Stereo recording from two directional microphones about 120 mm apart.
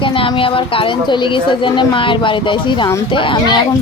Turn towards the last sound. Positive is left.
turn(degrees=45)  # may be behind; listen again after turning